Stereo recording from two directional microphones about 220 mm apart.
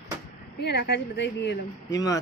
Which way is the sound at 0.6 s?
50° left (ahead or behind).